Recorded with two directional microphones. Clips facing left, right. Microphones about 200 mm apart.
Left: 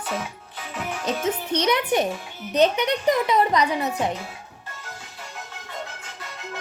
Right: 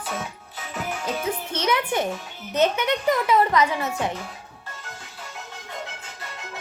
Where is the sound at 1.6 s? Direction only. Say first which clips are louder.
Left 2 dB; 15° left (ahead or behind).